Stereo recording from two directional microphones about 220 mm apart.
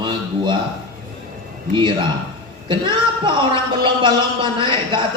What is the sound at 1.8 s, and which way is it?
A man's voice, 20° right (ahead or behind).